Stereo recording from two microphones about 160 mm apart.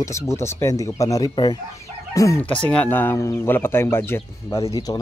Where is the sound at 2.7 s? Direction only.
10° left (ahead or behind).